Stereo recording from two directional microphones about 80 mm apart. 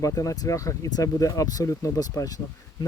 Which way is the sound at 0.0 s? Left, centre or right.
Left.